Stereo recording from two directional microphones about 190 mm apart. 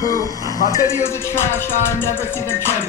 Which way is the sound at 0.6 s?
20° right (ahead or behind).